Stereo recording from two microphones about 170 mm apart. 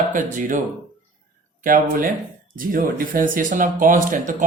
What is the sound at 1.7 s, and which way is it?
Speech, 55° right (ahead or behind).